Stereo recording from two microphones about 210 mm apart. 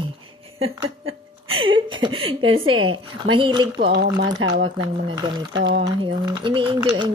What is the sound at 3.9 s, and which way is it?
Speech, 55° right (ahead or behind).